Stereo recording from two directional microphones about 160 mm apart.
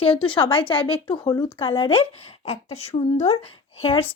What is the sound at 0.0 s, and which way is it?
Speech, 35° left (ahead or behind).